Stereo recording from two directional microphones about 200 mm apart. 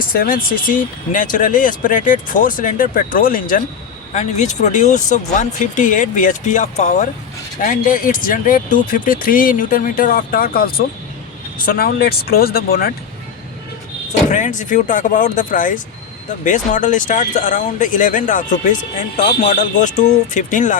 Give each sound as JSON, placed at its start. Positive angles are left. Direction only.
{"t": 0.0, "sound": "speech", "side_deg": 45}
{"t": 14.3, "sound": "speech", "side_deg": 40}